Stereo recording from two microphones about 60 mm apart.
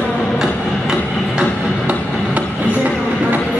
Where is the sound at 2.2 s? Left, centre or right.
Right.